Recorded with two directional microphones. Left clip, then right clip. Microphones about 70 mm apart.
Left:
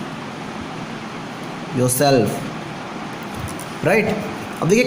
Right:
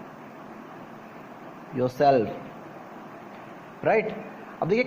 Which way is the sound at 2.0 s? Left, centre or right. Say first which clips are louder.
Left 3 dB; right.